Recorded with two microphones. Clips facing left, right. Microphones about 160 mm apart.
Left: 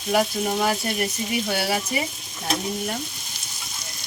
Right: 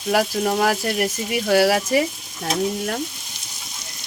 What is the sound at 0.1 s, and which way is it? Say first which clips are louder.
Speech: right 2 dB; 85° right.